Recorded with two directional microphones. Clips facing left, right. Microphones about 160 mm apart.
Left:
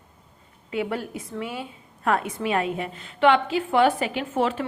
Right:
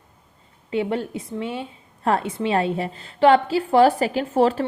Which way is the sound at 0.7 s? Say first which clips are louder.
Right 4 dB; 25° right (ahead or behind).